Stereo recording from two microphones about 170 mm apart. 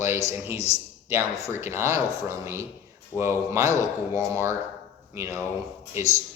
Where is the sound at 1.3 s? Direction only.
15° left (ahead or behind).